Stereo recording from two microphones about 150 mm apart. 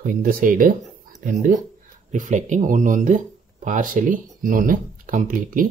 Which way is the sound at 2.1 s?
55° right (ahead or behind).